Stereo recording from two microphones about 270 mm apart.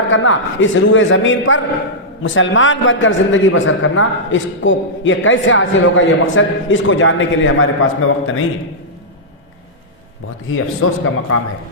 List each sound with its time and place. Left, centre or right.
0.1 s a man's voice: left
10.5 s a man's voice: left